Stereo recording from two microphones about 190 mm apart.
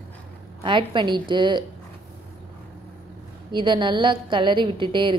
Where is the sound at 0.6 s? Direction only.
25° right (ahead or behind).